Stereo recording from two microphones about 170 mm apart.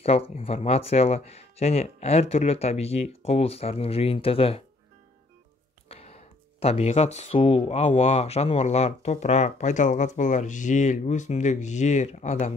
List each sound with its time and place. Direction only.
0.0 s speech: 35° left (ahead or behind)
5.9 s speech: 35° left (ahead or behind)